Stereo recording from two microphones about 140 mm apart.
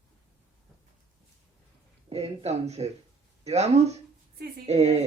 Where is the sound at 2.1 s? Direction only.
50° right (ahead or behind).